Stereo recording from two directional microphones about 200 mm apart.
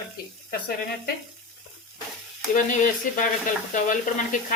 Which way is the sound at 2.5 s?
40° left (ahead or behind).